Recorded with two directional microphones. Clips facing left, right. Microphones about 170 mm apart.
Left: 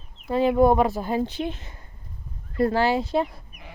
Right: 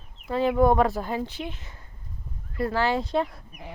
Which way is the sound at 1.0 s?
30° left (ahead or behind).